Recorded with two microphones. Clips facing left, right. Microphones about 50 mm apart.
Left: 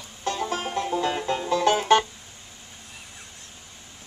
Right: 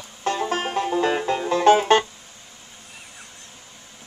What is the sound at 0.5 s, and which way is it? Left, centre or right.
Music, right.